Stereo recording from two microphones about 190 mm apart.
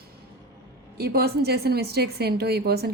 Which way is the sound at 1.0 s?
55° right (ahead or behind).